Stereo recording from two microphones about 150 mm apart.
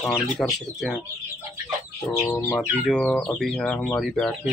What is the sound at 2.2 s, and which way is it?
Bird, 20° left (ahead or behind).